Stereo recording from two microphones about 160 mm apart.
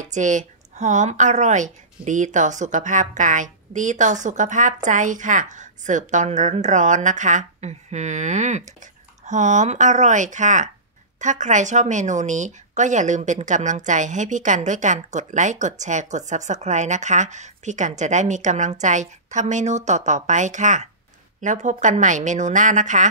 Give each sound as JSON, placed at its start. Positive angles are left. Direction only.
{"t": 0.1, "sound": "speech", "side_deg": -50}